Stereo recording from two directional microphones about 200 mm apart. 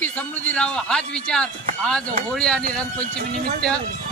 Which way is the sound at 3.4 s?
45° right (ahead or behind).